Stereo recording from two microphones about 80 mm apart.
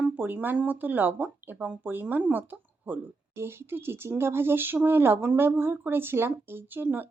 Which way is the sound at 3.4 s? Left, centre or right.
Right.